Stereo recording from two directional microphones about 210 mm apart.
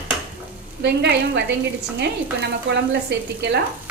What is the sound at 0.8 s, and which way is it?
Speech, 50° right (ahead or behind).